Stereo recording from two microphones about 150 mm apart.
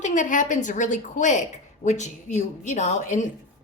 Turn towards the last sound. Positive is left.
turn(degrees=55)  # may be behind; listen again after turning